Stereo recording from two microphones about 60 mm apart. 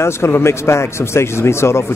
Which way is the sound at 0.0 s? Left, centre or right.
Left.